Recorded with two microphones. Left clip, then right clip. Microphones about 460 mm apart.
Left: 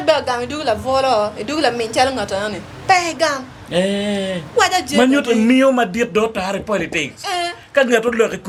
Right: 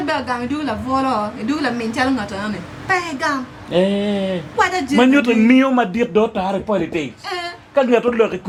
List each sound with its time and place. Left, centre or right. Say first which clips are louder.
0.0 s speech: left 5 dB; left
3.7 s speech: right 1 dB; centre
4.5 s speech: left 3 dB; left
4.9 s speech: right 2 dB; centre
7.3 s a sound: left 4 dB; left
7.8 s speech: even; centre